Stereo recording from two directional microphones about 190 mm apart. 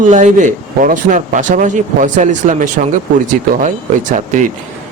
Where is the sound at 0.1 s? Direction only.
40° right (ahead or behind).